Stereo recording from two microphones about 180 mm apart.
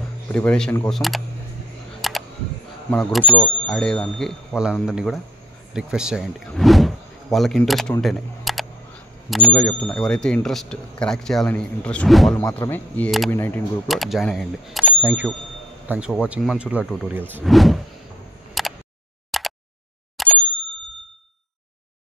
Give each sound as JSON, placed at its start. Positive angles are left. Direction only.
{"t": 0.3, "sound": "speech", "side_deg": 5}
{"t": 2.0, "sound": "camera", "side_deg": 0}
{"t": 2.9, "sound": "speech", "side_deg": 5}
{"t": 12.4, "sound": "speech", "side_deg": 10}
{"t": 13.8, "sound": "speech", "side_deg": 0}
{"t": 17.5, "sound": "speech", "side_deg": 0}
{"t": 18.6, "sound": "a sound", "side_deg": 0}
{"t": 20.2, "sound": "bicycle bell", "side_deg": 5}